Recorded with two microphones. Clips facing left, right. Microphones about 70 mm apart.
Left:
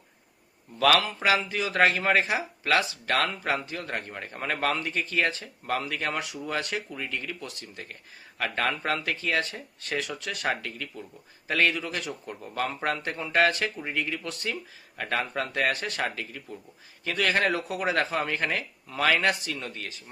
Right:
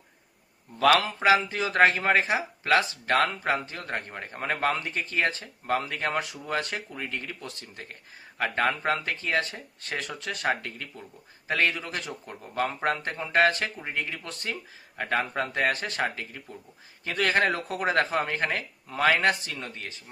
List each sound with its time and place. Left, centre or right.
0.8 s speech: right